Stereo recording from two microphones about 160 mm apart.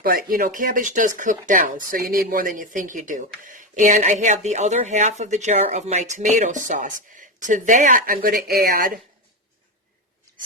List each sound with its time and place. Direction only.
0.0 s speech: 65° right (ahead or behind)